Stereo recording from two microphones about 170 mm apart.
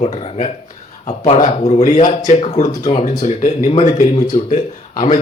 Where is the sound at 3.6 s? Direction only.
40° left (ahead or behind).